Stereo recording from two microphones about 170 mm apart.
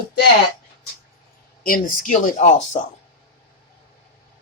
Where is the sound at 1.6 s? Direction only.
55° left (ahead or behind).